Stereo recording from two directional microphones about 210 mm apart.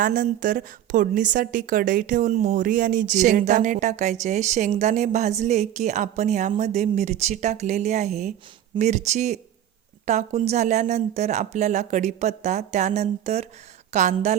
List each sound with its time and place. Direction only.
0.0 s a woman's voice: 40° right (ahead or behind)